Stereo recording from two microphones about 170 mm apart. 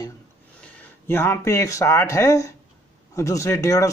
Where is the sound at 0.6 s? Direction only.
10° left (ahead or behind).